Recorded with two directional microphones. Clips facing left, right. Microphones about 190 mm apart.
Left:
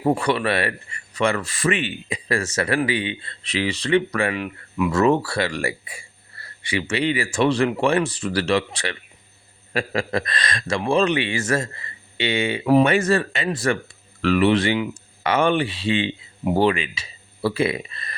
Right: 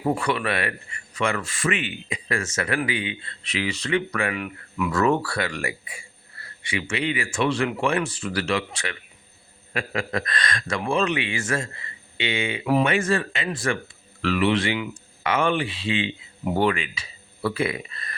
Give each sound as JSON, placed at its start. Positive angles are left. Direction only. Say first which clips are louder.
{"t": 0.0, "sound": "speech", "louder": "left 4 dB", "side_deg": 35}
{"t": 16.4, "sound": "speech", "louder": "left 3 dB", "side_deg": 25}